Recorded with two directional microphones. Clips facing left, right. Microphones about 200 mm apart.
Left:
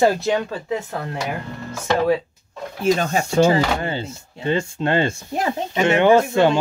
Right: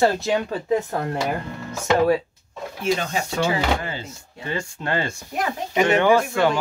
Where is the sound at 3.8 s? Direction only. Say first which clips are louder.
Left 6 dB; 30° left (ahead or behind).